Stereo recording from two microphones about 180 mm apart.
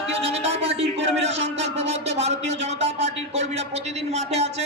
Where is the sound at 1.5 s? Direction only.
35° right (ahead or behind).